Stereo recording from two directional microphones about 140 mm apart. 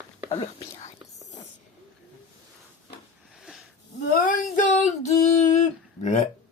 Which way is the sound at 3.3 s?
Centre (ahead or behind).